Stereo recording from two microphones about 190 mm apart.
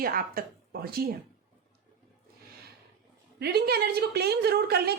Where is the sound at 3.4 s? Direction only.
55° right (ahead or behind).